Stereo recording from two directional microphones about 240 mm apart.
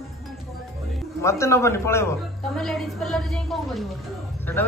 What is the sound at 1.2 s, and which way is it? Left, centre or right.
A man's voice, centre.